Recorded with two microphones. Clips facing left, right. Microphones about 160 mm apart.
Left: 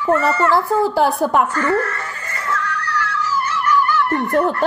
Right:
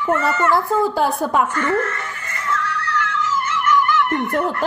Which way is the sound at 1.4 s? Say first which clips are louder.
Left 1 dB; 40° left (ahead or behind).